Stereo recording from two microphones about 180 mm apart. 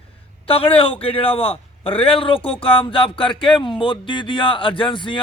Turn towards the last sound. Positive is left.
turn(degrees=25)  # may be behind; listen again after turning